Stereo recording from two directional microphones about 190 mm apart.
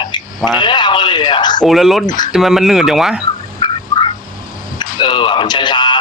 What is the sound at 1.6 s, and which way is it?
Speech, centre (ahead or behind).